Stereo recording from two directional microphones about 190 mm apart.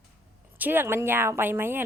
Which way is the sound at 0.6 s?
10° right (ahead or behind).